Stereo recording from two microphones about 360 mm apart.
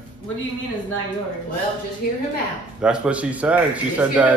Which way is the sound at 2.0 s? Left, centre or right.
Left.